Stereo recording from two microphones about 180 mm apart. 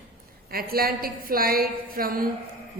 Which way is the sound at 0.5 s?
55° right (ahead or behind).